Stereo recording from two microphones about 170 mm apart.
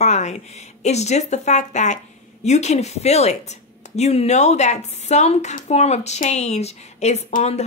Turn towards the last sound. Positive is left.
turn(degrees=40)  # may be behind; listen again after turning